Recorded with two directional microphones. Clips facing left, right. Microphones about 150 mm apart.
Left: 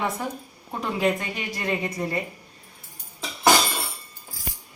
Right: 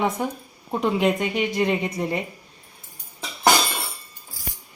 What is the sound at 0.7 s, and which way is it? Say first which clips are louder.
A woman's voice: right 3 dB; 20° right (ahead or behind).